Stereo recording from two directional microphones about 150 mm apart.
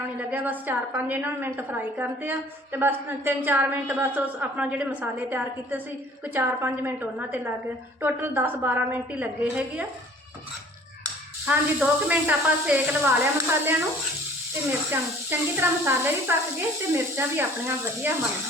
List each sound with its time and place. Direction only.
0.2 s a woman's voice: 10° right (ahead or behind)
11.4 s a woman's voice: 10° right (ahead or behind)
14.8 s a woman's voice: 15° right (ahead or behind)